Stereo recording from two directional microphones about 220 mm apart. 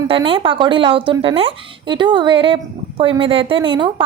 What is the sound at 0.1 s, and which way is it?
A woman's voice, 25° right (ahead or behind).